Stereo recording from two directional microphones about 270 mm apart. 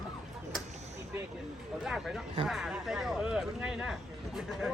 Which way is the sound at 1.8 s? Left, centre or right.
Centre.